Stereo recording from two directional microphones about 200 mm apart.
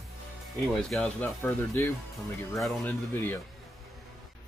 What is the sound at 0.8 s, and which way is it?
Speech, centre (ahead or behind).